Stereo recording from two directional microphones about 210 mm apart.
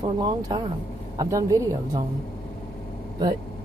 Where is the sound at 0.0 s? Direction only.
20° right (ahead or behind).